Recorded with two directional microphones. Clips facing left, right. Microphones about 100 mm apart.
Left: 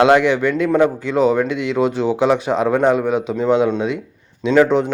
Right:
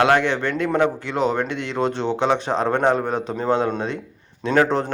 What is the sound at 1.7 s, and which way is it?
Speech, 10° left (ahead or behind).